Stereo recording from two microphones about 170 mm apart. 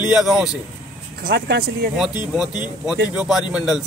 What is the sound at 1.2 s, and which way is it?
Speech, 75° right (ahead or behind).